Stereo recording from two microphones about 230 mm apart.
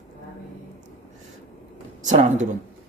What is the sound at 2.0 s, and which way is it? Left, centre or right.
Speech, right.